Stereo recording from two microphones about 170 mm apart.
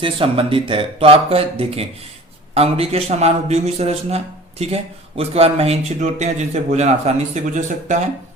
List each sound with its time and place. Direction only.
0.0 s speech: 30° right (ahead or behind)